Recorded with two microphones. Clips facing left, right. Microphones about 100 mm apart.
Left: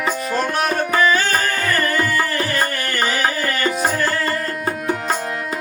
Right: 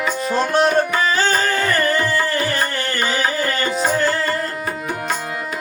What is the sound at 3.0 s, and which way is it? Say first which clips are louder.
Music: even; 30° right (ahead or behind).